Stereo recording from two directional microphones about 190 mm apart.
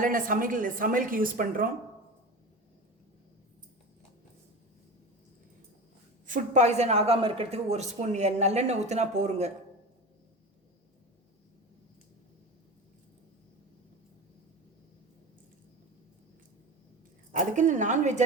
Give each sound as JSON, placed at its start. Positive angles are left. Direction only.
{"t": 0.0, "sound": "a woman's voice", "side_deg": -45}
{"t": 6.2, "sound": "speech", "side_deg": -40}
{"t": 17.3, "sound": "speech", "side_deg": -40}